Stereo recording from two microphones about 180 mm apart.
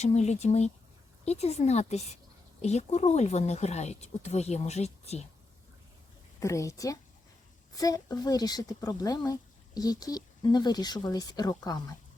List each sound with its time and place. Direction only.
0.0 s speech: 40° left (ahead or behind)
6.4 s a woman's voice: 15° left (ahead or behind)